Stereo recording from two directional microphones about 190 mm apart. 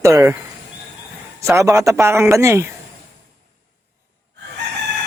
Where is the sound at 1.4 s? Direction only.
15° right (ahead or behind).